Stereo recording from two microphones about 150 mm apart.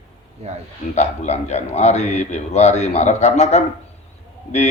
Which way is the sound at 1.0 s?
50° left (ahead or behind).